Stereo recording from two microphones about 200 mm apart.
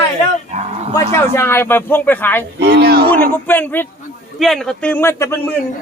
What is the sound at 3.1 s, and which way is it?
A man's voice, 10° left (ahead or behind).